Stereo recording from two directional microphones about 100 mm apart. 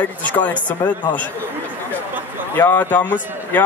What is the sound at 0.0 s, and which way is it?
Speech, 15° left (ahead or behind).